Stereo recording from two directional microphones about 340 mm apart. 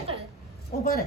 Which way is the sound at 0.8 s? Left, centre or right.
Left.